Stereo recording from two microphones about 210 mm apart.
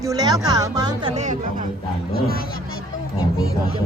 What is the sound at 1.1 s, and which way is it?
Speech, 35° right (ahead or behind).